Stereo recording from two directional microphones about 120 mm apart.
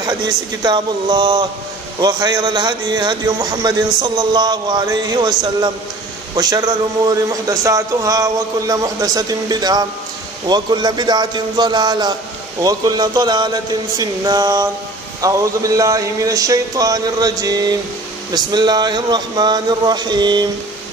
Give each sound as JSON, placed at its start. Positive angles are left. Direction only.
{"t": 0.0, "sound": "a man's voice", "side_deg": -35}
{"t": 6.3, "sound": "a man's voice", "side_deg": -35}